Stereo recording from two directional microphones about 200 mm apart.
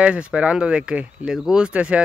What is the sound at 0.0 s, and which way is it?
Speech, 5° right (ahead or behind).